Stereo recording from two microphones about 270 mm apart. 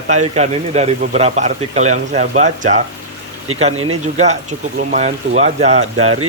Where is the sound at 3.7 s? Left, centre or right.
Right.